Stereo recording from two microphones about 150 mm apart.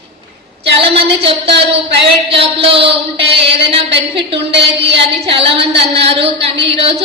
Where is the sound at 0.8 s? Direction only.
40° right (ahead or behind).